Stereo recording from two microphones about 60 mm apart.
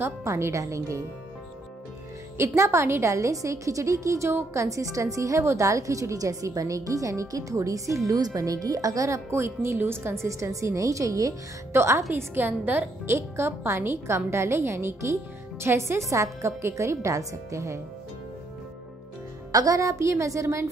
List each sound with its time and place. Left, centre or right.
0.2 s a woman's voice: right
2.3 s a woman's voice: right
8.4 s speech: right
9.3 s a woman's voice: right
10.2 s a woman's voice: right
11.7 s a woman's voice: right
12.1 s a woman's voice: right
13.0 s a woman's voice: right
16.1 s a woman's voice: right
19.5 s a woman's voice: right